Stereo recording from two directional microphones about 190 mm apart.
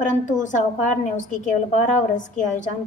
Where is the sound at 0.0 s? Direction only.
40° left (ahead or behind).